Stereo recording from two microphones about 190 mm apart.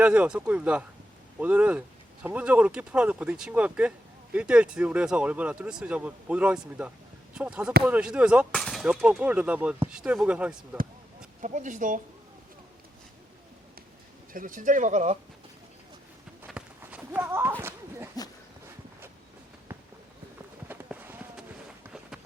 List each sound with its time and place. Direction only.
0.0 s speech: 5° right (ahead or behind)
11.3 s speech: 40° right (ahead or behind)
14.3 s speech: 45° right (ahead or behind)
16.5 s clip-clop: 5° right (ahead or behind)
17.6 s a sound: 10° right (ahead or behind)
20.7 s a sound: 10° right (ahead or behind)